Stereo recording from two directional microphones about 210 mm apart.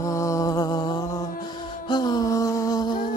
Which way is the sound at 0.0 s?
15° left (ahead or behind).